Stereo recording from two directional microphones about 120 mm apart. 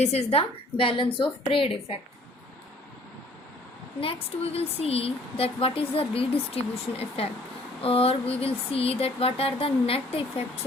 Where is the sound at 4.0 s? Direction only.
50° left (ahead or behind).